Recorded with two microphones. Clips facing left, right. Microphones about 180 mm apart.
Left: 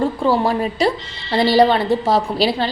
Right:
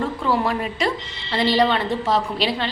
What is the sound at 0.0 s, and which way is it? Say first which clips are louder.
Speech: left 5 dB; 30° left (ahead or behind).